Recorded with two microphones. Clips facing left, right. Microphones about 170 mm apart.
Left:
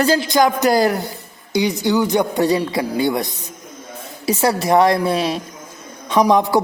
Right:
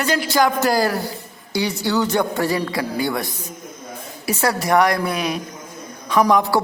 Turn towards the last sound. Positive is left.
turn(degrees=20)  # may be behind; listen again after turning